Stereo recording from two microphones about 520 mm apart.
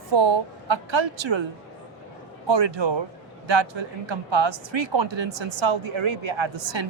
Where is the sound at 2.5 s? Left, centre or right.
Right.